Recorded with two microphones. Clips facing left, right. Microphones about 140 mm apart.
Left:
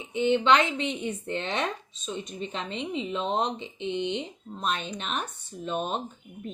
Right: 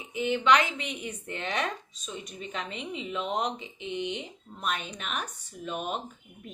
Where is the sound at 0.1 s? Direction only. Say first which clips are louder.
Left 2 dB; 30° left (ahead or behind).